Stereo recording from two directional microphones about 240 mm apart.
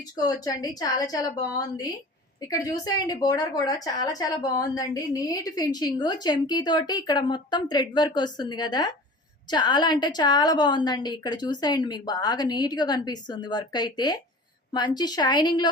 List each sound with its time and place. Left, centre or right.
0.2 s a woman's voice: centre